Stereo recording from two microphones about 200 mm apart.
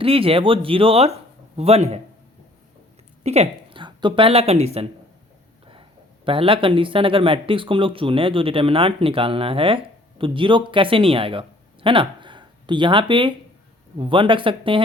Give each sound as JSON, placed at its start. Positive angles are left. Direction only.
{"t": 0.0, "sound": "speech", "side_deg": -30}
{"t": 3.2, "sound": "speech", "side_deg": -30}
{"t": 6.2, "sound": "speech", "side_deg": -25}